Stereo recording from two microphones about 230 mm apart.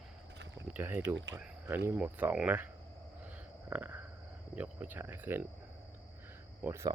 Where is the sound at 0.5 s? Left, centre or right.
Centre.